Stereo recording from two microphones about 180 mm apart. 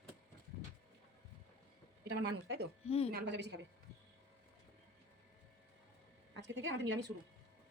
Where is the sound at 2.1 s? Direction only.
65° right (ahead or behind).